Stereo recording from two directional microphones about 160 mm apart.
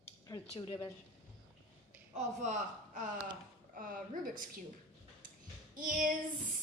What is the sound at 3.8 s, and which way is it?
Speech, 60° right (ahead or behind).